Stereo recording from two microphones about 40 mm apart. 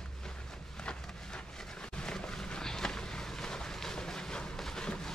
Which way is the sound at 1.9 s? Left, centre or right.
Centre.